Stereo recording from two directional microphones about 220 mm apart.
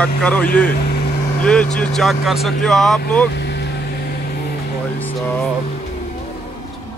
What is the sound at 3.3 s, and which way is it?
Vehicle, 50° left (ahead or behind).